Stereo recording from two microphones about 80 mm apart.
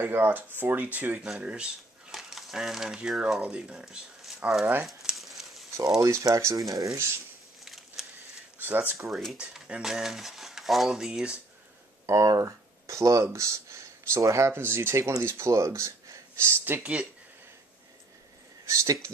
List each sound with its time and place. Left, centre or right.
0.0 s speech: right
1.4 s a sound: centre
3.2 s speech: centre
4.8 s a sound: centre
5.9 s speech: right
7.6 s a sound: centre
8.5 s speech: right
9.1 s speech: centre
12.1 s speech: right; by 17.1 s centre
18.7 s speech: right